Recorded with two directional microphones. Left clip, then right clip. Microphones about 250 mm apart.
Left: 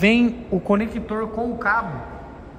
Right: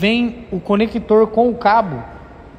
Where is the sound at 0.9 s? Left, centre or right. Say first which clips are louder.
Right 13 dB; right.